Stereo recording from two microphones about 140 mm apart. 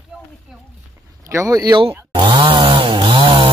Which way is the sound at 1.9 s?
35° right (ahead or behind).